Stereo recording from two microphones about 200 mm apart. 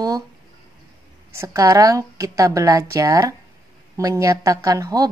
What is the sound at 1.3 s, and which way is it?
A woman's voice, 15° right (ahead or behind).